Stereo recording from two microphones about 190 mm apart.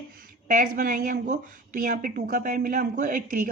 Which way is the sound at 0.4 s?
45° right (ahead or behind).